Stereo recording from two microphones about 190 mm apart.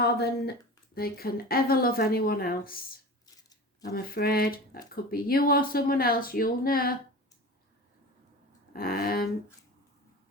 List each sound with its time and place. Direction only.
0.0 s a woman's voice: 55° left (ahead or behind)
3.2 s a sound: 20° left (ahead or behind)
3.9 s a woman's voice: 55° left (ahead or behind)
8.7 s a woman's voice: 50° left (ahead or behind)